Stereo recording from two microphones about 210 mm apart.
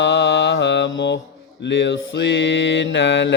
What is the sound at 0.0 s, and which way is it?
Mantra, 55° left (ahead or behind).